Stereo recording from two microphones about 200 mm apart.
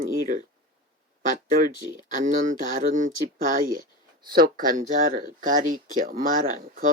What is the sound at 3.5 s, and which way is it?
Speech, 45° right (ahead or behind).